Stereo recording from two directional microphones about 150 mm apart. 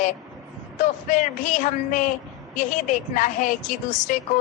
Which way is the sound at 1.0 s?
60° left (ahead or behind).